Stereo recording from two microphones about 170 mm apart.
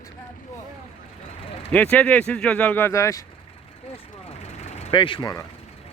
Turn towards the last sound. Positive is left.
turn(degrees=25)  # may be behind; listen again after turning